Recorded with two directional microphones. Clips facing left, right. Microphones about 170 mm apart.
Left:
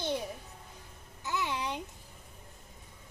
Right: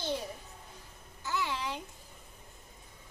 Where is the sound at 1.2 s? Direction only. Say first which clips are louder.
Left 1 dB; 20° left (ahead or behind).